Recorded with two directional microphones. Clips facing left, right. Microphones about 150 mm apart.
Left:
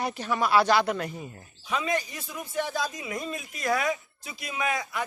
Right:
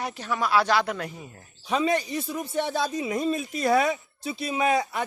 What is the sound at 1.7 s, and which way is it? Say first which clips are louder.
A woman's voice: right 5 dB; 35° right (ahead or behind).